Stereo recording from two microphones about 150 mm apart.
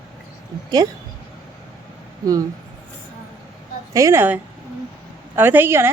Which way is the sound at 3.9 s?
20° right (ahead or behind).